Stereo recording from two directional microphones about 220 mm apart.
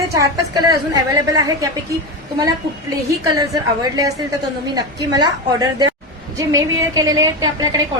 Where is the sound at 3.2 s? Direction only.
15° right (ahead or behind).